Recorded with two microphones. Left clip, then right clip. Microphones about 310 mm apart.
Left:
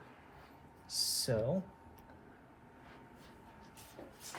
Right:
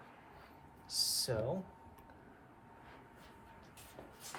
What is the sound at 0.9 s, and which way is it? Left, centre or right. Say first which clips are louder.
Speech: left 1 dB; centre.